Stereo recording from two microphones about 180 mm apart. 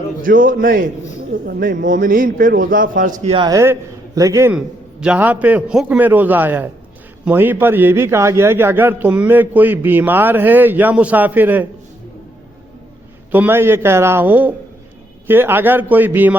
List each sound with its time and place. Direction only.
0.2 s a man's voice: 50° right (ahead or behind)
3.2 s a man's voice: 25° right (ahead or behind)
4.5 s a man's voice: 5° right (ahead or behind)
13.3 s a man's voice: 10° right (ahead or behind)